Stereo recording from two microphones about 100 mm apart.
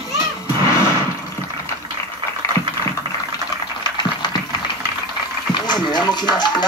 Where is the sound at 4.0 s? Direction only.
45° left (ahead or behind).